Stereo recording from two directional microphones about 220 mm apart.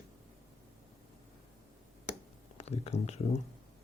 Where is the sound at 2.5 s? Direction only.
30° left (ahead or behind).